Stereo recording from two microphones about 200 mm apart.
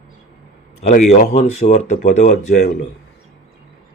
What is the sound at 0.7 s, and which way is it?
Speech, 35° left (ahead or behind).